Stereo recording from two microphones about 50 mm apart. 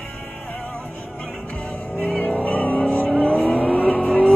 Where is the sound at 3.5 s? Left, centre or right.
Left.